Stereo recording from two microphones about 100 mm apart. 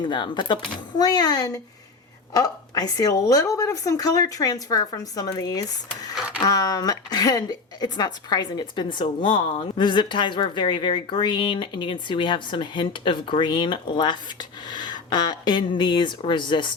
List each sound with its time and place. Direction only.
0.0 s a woman's voice: 50° left (ahead or behind)